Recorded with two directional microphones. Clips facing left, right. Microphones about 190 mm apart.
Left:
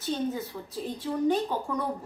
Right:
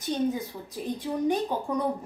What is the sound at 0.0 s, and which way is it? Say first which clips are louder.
Speech: right 2 dB; 15° right (ahead or behind).